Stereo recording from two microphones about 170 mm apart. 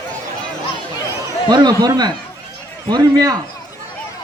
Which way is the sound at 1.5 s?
25° right (ahead or behind).